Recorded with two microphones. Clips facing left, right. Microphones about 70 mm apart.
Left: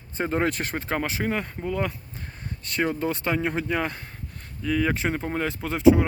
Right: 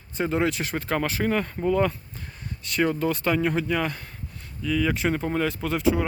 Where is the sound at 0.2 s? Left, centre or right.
Left.